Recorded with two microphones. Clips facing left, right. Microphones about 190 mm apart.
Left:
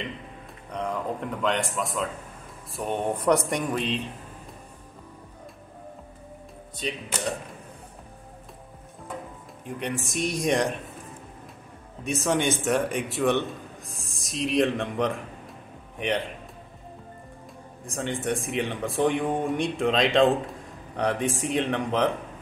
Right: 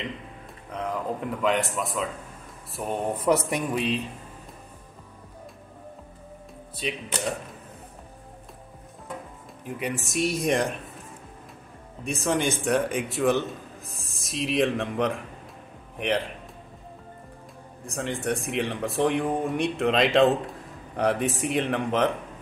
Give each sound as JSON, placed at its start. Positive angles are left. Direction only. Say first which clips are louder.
{"t": 0.7, "sound": "speech", "louder": "even", "side_deg": -5}
{"t": 6.8, "sound": "speech", "louder": "right 1 dB", "side_deg": -5}
{"t": 9.7, "sound": "speech", "louder": "even", "side_deg": -5}
{"t": 12.0, "sound": "speech", "louder": "left 1 dB", "side_deg": 0}
{"t": 17.8, "sound": "speech", "louder": "even", "side_deg": 0}